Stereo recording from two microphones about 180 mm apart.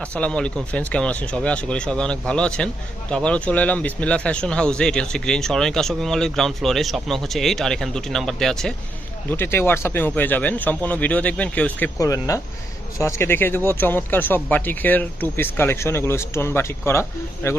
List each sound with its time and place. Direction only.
0.0 s speech: 5° left (ahead or behind)
11.9 s speech: 20° left (ahead or behind)